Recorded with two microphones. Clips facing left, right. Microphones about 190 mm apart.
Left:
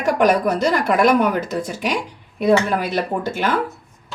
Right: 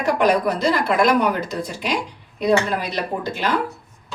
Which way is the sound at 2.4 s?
50° left (ahead or behind).